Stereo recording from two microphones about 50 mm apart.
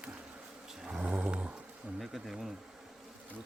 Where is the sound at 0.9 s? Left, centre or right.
Right.